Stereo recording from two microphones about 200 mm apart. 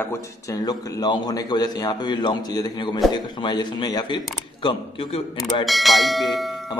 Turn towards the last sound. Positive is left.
turn(degrees=0)  # may be behind; listen again after turning